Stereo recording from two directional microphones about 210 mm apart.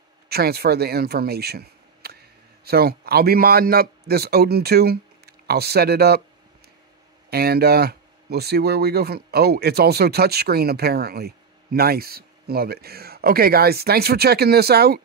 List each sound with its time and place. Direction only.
0.3 s speech: 50° right (ahead or behind)
7.2 s speech: 50° right (ahead or behind)